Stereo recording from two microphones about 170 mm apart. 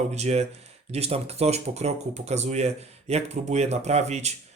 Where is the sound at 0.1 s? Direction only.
40° right (ahead or behind).